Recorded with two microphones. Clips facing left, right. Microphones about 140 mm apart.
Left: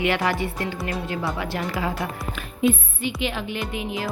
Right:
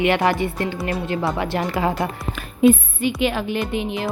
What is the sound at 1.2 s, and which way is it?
Speech, 45° right (ahead or behind).